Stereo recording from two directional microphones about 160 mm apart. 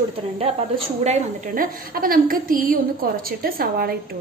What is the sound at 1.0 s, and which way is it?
A woman's voice, 50° right (ahead or behind).